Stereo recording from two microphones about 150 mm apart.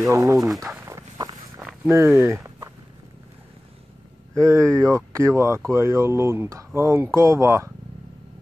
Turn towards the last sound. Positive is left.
turn(degrees=-20)  # may be behind; listen again after turning